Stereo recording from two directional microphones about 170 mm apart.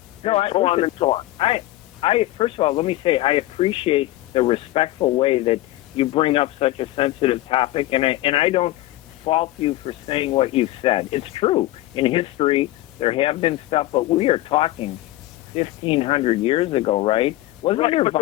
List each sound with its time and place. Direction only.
0.2 s speech: 35° left (ahead or behind)